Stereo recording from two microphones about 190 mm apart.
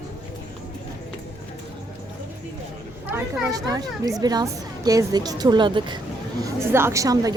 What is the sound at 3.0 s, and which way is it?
A woman's voice, 15° right (ahead or behind).